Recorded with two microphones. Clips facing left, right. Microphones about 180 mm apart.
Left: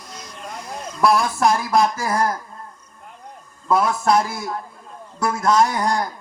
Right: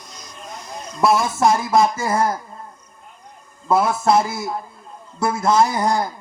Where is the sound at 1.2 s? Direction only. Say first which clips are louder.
Right 1 dB; 20° right (ahead or behind).